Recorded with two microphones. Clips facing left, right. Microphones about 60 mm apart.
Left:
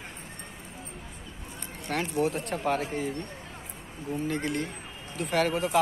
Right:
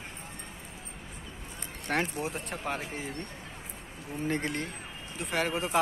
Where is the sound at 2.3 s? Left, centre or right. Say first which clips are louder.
Left 6 dB; centre.